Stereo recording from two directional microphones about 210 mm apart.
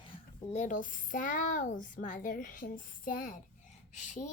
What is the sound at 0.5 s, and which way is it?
A child's voice, 35° left (ahead or behind).